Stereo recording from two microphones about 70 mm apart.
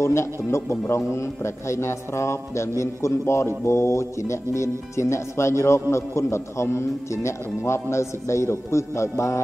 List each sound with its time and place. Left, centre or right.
0.0 s a man's voice: left